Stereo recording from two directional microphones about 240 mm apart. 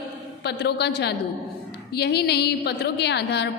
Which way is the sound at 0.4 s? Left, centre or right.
Left.